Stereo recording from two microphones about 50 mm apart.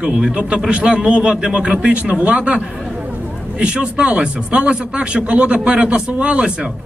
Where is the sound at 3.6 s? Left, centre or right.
Right.